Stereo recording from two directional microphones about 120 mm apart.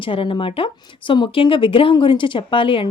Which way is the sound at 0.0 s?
45° left (ahead or behind).